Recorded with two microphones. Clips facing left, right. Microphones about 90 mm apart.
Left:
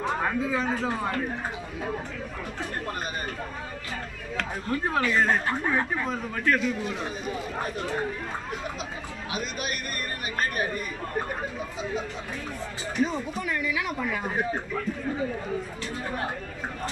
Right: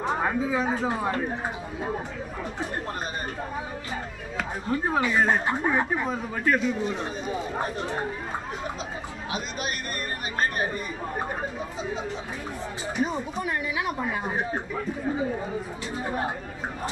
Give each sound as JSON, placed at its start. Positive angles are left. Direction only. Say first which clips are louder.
{"t": 0.0, "sound": "a man's voice", "louder": "right 1 dB", "side_deg": -15}
{"t": 4.4, "sound": "speech", "louder": "right 1 dB", "side_deg": -10}
{"t": 12.9, "sound": "speech", "louder": "left 1 dB", "side_deg": -20}